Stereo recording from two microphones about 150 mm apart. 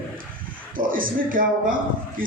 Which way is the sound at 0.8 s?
70° right (ahead or behind).